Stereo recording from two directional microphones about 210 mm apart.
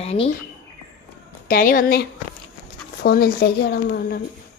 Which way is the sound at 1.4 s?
40° left (ahead or behind).